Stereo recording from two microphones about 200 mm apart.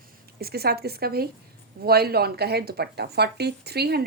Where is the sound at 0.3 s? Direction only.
50° right (ahead or behind).